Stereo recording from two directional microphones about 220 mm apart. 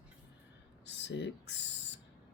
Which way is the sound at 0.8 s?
55° left (ahead or behind).